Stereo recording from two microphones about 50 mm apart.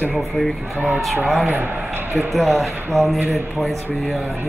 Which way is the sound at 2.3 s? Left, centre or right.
Centre.